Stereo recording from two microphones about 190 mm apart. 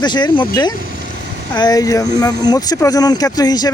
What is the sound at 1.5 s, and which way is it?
Speech, 20° left (ahead or behind).